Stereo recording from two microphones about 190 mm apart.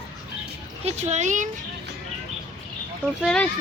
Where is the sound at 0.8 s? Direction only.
35° right (ahead or behind).